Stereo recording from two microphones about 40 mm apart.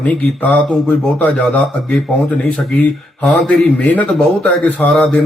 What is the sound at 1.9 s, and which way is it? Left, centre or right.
Speech, left.